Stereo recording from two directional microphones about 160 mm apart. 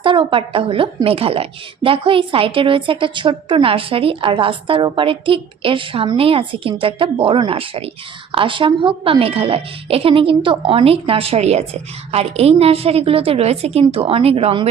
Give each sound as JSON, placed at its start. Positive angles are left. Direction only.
{"t": 0.0, "sound": "a woman's voice", "side_deg": -30}